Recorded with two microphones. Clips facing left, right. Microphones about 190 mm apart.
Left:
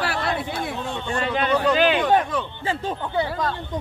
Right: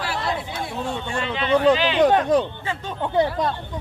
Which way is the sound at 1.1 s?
45° left (ahead or behind).